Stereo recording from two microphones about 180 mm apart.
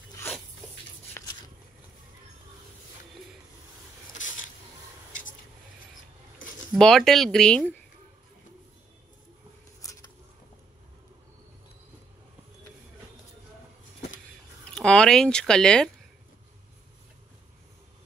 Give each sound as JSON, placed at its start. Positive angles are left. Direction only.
{"t": 1.2, "sound": "biting", "side_deg": 15}
{"t": 6.7, "sound": "speech", "side_deg": 0}
{"t": 9.8, "sound": "a sound", "side_deg": 20}
{"t": 14.7, "sound": "speech", "side_deg": 5}